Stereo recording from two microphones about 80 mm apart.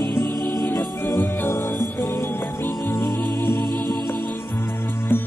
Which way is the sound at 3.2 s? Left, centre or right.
Right.